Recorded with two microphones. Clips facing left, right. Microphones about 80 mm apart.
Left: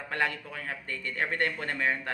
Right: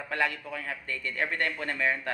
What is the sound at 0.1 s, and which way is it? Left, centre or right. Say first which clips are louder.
Speech: right 1 dB; left.